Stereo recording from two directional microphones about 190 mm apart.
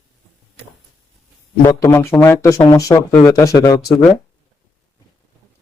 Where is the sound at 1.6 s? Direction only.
15° left (ahead or behind).